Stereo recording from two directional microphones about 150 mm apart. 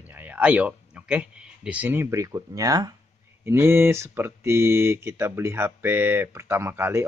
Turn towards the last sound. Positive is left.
turn(degrees=-15)  # may be behind; listen again after turning